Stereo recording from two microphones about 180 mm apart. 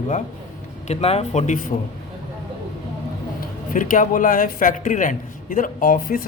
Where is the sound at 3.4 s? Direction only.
50° left (ahead or behind).